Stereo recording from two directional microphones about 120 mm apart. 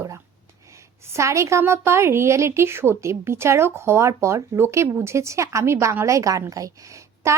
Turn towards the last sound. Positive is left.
turn(degrees=-25)  # may be behind; listen again after turning